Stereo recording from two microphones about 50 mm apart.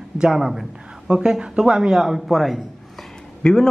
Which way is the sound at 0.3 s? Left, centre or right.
Centre.